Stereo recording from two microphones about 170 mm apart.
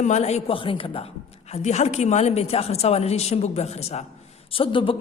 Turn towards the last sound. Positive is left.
turn(degrees=30)  # may be behind; listen again after turning